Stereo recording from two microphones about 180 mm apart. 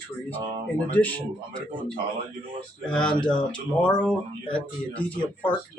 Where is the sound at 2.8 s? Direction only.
5° left (ahead or behind).